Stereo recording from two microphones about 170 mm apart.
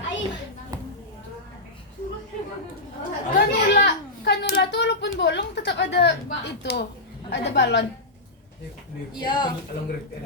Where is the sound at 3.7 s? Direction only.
80° left.